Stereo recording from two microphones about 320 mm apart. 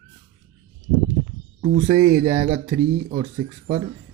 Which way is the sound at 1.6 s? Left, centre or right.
Centre.